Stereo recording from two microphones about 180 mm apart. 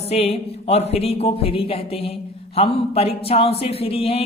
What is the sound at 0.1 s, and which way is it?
Speech, 35° left (ahead or behind).